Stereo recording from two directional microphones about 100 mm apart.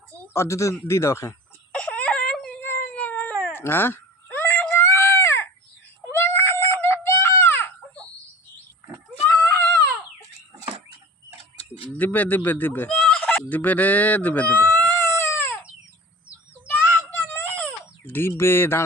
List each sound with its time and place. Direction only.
0.3 s speech: 30° left (ahead or behind)
1.7 s whimper: 15° left (ahead or behind)
2.6 s cat: 20° left (ahead or behind)
4.7 s baby cry: 25° left (ahead or behind)
6.1 s a sound: 25° left (ahead or behind)
9.2 s a sound: 20° left (ahead or behind)
11.9 s speech: 15° left (ahead or behind)
14.8 s baby cry: 25° left (ahead or behind)
16.7 s baby cry: 20° left (ahead or behind)